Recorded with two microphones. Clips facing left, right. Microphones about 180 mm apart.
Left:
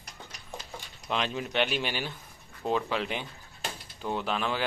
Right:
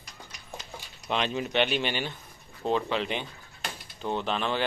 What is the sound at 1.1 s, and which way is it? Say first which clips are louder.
Speech: right 2 dB; centre (ahead or behind).